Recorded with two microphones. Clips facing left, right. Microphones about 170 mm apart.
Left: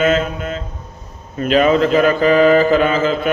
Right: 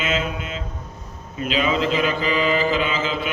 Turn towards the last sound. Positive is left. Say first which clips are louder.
# left 8 dB
turn(degrees=50)  # may be behind; listen again after turning